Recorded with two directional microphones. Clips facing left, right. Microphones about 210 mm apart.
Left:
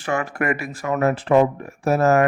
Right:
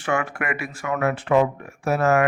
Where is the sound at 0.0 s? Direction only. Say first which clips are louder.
Left 2 dB; 40° left (ahead or behind).